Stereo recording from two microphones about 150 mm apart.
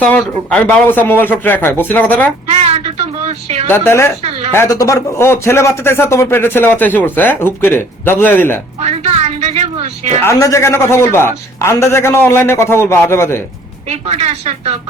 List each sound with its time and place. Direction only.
0.0 s speech: 10° left (ahead or behind)
2.5 s a sound: 45° right (ahead or behind)
3.7 s speech: 15° left (ahead or behind)
8.8 s a sound: 45° right (ahead or behind)
10.2 s speech: 20° left (ahead or behind)
13.8 s speech: 45° right (ahead or behind)